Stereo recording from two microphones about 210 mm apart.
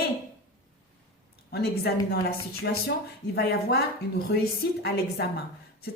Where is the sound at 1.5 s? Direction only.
50° left (ahead or behind).